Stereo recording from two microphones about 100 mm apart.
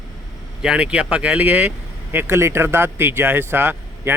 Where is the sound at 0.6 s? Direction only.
10° right (ahead or behind).